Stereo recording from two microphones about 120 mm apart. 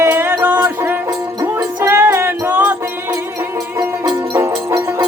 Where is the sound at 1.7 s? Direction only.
20° right (ahead or behind).